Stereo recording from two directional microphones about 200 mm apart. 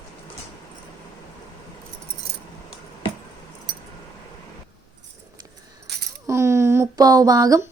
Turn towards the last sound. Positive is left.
turn(degrees=-15)  # may be behind; listen again after turning